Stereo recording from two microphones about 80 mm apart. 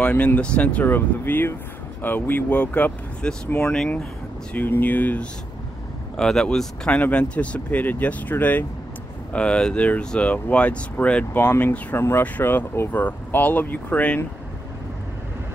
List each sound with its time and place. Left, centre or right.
0.0 s speech: centre
4.6 s speech: left
6.1 s speech: centre
7.0 s speech: centre